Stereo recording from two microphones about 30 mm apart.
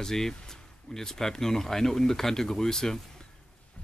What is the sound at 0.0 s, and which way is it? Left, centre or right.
Speech, centre.